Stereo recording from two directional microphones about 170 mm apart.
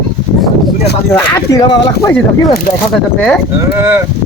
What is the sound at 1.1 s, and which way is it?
Speech, 20° left (ahead or behind).